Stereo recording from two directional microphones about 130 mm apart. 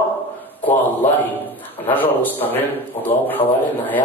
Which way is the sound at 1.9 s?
15° left (ahead or behind).